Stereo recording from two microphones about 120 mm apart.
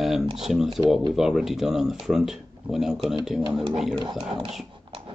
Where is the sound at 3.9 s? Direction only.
40° right (ahead or behind).